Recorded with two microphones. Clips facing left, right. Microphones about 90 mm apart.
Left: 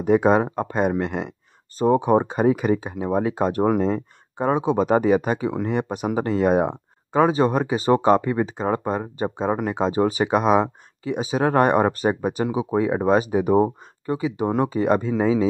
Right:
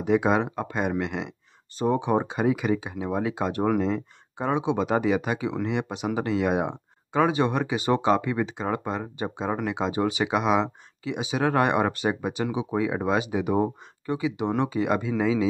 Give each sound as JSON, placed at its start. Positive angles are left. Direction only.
{"t": 0.0, "sound": "speech", "side_deg": 45}